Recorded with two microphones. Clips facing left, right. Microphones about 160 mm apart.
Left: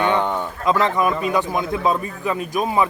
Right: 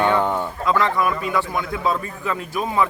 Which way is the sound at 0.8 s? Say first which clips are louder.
Left 2 dB; 20° left (ahead or behind).